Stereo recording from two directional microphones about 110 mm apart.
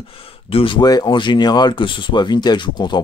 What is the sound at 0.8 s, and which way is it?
Speech, 40° left (ahead or behind).